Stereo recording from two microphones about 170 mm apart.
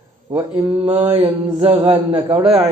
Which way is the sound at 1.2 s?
25° right (ahead or behind).